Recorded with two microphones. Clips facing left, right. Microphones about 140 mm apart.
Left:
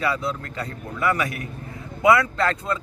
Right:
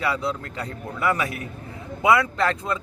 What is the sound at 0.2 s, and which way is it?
A man's voice, 20° right (ahead or behind).